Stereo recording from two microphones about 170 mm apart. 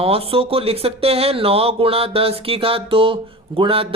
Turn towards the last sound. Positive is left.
turn(degrees=-30)  # may be behind; listen again after turning